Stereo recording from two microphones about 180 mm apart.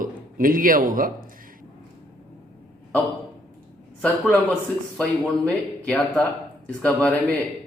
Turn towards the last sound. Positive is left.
turn(degrees=5)  # may be behind; listen again after turning